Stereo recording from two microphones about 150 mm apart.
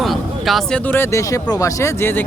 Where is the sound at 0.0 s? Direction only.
Centre (ahead or behind).